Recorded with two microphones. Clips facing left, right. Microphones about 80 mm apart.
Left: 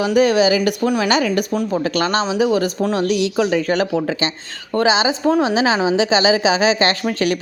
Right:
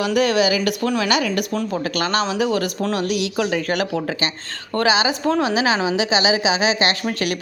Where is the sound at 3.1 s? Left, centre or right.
Left.